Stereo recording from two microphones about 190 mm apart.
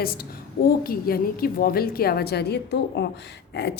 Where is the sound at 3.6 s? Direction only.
60° left (ahead or behind).